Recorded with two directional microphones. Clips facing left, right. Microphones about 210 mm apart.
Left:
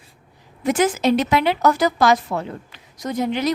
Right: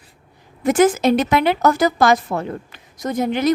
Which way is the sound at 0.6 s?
50° right (ahead or behind).